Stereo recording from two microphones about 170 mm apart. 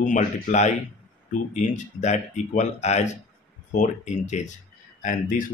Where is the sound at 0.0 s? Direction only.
45° left (ahead or behind).